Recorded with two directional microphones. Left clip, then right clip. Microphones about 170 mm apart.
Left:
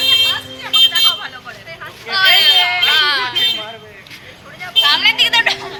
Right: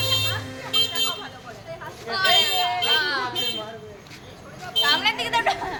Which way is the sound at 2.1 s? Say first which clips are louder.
Left 9 dB; 30° right (ahead or behind).